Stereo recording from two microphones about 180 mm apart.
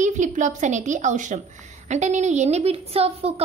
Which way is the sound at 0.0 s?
45° right (ahead or behind).